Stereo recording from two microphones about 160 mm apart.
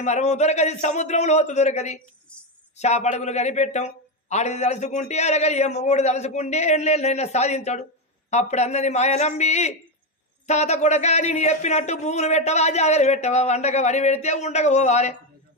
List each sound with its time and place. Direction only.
0.0 s speech: 45° left (ahead or behind)